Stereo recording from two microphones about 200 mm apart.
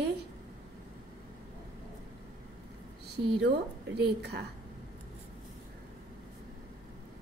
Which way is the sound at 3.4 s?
55° right (ahead or behind).